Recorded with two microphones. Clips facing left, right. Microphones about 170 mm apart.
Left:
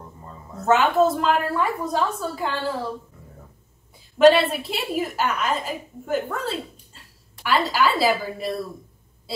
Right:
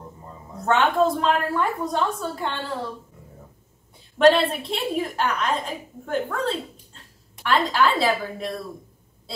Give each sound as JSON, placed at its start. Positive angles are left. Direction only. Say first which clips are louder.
{"t": 0.7, "sound": "a woman's voice", "louder": "left 2 dB", "side_deg": 5}
{"t": 4.2, "sound": "a woman's voice", "louder": "left 2 dB", "side_deg": 5}